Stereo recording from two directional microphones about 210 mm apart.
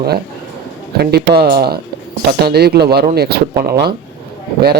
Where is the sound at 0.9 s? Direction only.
50° right (ahead or behind).